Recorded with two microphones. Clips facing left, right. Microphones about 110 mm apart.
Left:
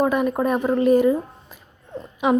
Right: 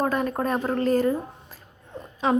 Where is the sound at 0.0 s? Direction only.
10° left (ahead or behind).